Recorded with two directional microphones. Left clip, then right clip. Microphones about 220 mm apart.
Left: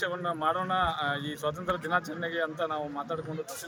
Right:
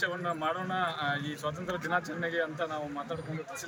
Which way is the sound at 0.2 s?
40° left (ahead or behind).